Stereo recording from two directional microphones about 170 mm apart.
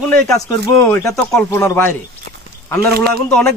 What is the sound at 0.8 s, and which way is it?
Speech, 15° left (ahead or behind).